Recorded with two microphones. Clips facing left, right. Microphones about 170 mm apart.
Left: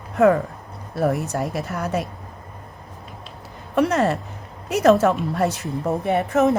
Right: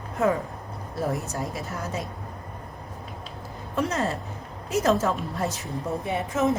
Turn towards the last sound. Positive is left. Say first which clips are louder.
# left 6 dB
turn(degrees=65)  # may be behind; listen again after turning